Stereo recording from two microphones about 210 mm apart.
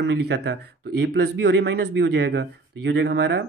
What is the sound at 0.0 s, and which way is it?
Speech, 55° right (ahead or behind).